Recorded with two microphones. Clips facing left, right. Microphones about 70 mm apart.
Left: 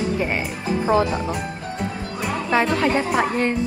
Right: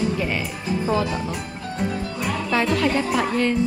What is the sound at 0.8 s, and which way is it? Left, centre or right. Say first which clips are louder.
Speech: left 4 dB; left.